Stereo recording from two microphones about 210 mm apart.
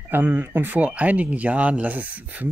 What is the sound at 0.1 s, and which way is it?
Speech, 10° right (ahead or behind).